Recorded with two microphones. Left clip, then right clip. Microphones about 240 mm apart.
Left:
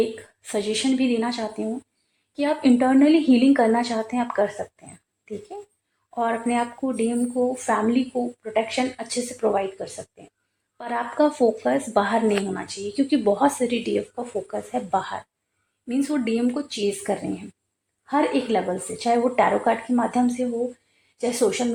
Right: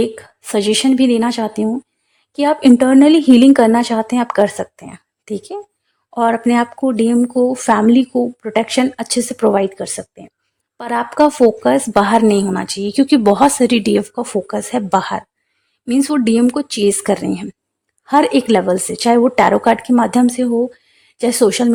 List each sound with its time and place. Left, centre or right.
0.4 s speech: right